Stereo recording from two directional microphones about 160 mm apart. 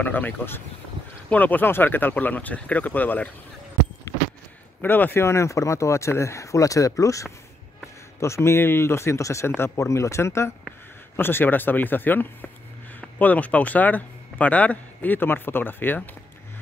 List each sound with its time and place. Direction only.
0.0 s speech: 10° left (ahead or behind)
4.8 s speech: 15° left (ahead or behind)